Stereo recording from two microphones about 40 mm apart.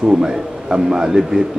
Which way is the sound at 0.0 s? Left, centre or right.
Centre.